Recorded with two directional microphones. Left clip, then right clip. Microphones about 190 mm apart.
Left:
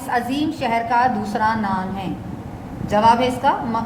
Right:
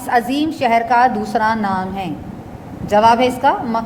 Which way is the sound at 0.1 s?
45° right (ahead or behind).